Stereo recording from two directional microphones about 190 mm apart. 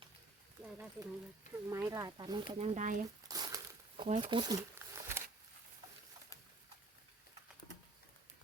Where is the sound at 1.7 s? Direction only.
15° right (ahead or behind).